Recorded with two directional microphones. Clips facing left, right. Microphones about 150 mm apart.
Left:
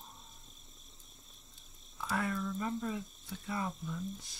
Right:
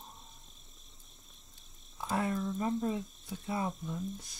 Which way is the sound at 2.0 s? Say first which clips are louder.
Right 3 dB; 25° right (ahead or behind).